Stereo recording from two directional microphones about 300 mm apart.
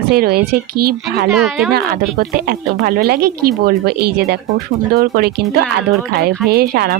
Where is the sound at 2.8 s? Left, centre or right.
Right.